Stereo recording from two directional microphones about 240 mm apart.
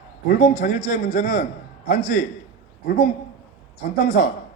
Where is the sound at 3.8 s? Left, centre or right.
Left.